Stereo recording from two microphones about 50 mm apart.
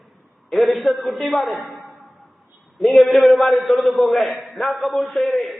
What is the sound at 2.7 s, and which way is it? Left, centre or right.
A man's voice, centre.